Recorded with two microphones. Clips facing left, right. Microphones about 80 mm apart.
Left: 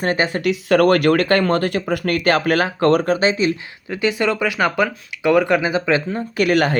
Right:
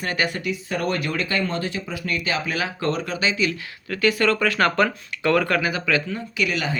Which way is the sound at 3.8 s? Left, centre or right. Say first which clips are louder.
Left 1 dB; centre.